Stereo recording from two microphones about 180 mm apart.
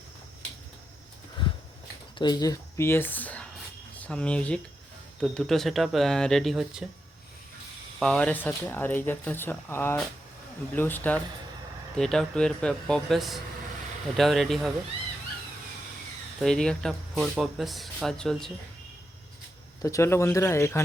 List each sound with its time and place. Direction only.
1.4 s a sound: 25° left (ahead or behind)
2.1 s speech: 20° left (ahead or behind); by 6.8 s centre (ahead or behind)
7.9 s speech: 5° left (ahead or behind)
16.4 s speech: 5° left (ahead or behind)
19.8 s speech: 15° left (ahead or behind)